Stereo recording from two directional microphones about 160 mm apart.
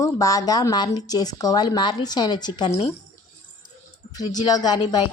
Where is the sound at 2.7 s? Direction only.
35° left (ahead or behind).